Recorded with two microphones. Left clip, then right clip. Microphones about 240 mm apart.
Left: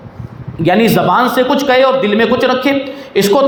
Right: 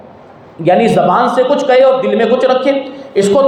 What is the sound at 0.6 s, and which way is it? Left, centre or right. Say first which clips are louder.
A man's voice: right 2 dB; left.